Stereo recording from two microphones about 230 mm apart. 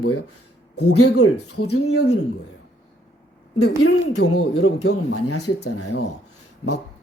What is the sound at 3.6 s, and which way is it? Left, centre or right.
Speech, left.